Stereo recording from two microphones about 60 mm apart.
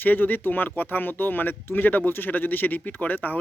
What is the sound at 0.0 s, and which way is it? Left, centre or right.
Speech, left.